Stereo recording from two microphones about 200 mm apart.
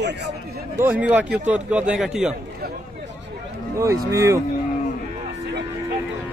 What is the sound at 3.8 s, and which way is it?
Speech, 15° right (ahead or behind).